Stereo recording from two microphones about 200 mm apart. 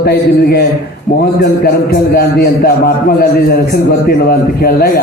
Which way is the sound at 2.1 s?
50° left (ahead or behind).